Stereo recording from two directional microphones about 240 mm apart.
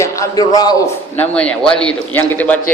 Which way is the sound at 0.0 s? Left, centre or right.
Centre.